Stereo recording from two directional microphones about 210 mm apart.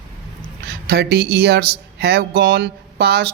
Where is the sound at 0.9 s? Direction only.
50° right (ahead or behind).